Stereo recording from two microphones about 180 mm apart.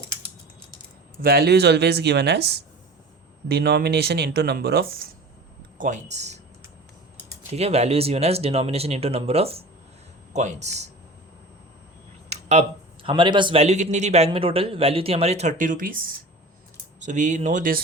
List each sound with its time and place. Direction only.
1.2 s speech: 60° right (ahead or behind)
3.5 s speech: 60° right (ahead or behind)
5.7 s speech: 45° right (ahead or behind)
7.5 s speech: 35° right (ahead or behind)
12.3 s speech: 40° right (ahead or behind)